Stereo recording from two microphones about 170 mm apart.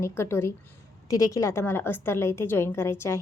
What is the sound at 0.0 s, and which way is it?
A woman's voice, 15° left (ahead or behind).